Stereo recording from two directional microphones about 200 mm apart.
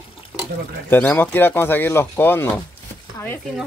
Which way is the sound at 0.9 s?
10° left (ahead or behind).